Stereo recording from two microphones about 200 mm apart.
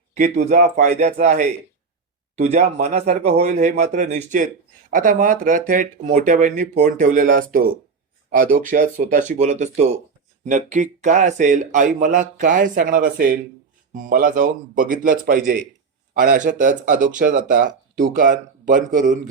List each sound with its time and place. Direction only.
0.1 s a man's voice: 35° right (ahead or behind)